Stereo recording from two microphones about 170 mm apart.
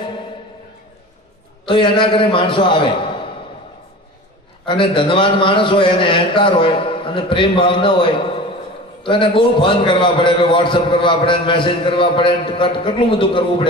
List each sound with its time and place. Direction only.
1.7 s a man's voice: 30° left (ahead or behind)
4.6 s a man's voice: 30° left (ahead or behind)